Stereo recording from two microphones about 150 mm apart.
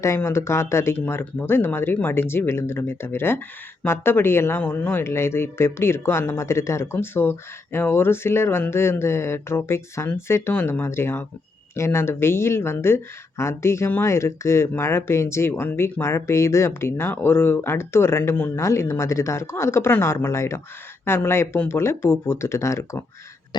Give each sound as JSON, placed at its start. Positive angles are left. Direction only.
{"t": 0.0, "sound": "speech", "side_deg": 20}